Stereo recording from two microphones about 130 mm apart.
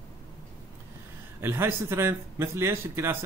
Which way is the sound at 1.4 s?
15° right (ahead or behind).